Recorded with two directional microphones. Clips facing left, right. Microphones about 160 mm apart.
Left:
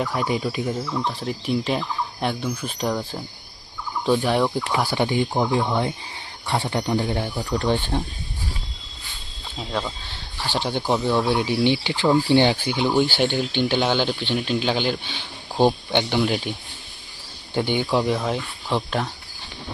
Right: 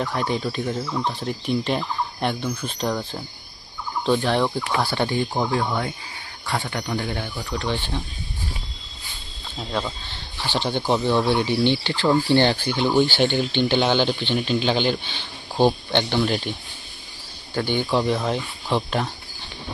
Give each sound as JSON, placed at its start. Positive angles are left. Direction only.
{"t": 0.0, "sound": "speech", "side_deg": 10}
{"t": 7.6, "sound": "speech", "side_deg": 45}
{"t": 10.4, "sound": "speech", "side_deg": 5}